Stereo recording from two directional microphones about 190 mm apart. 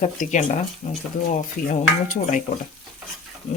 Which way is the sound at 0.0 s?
40° left (ahead or behind).